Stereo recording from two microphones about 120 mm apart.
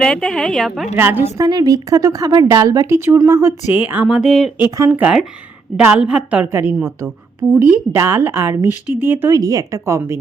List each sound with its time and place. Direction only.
0.0 s speech: 5° left (ahead or behind)
0.9 s speech: 20° right (ahead or behind)
1.5 s a woman's voice: 30° right (ahead or behind); by 4.1 s 15° right (ahead or behind)
4.1 s speech: centre (ahead or behind)
4.9 s a woman's voice: 10° right (ahead or behind)
6.4 s a woman's voice: 20° right (ahead or behind)
9.4 s speech: 30° right (ahead or behind)